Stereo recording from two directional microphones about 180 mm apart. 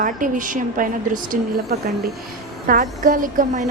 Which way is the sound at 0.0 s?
50° right (ahead or behind).